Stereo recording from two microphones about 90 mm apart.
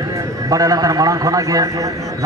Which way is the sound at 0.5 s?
40° right (ahead or behind).